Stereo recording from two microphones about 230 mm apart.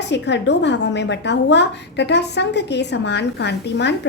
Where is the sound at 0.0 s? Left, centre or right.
Left.